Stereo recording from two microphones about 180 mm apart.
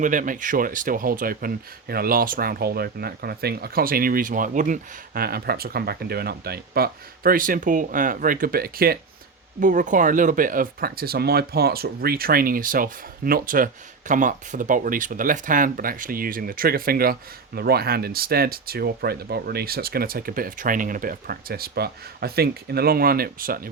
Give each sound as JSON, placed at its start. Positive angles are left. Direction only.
{"t": 0.0, "sound": "speech", "side_deg": -45}